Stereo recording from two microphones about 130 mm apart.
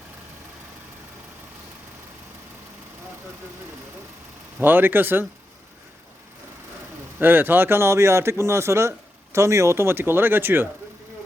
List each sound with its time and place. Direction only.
4.6 s speech: 15° right (ahead or behind)
7.2 s a man's voice: 15° right (ahead or behind)